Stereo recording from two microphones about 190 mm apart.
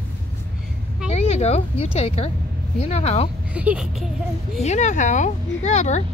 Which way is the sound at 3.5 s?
5° right (ahead or behind).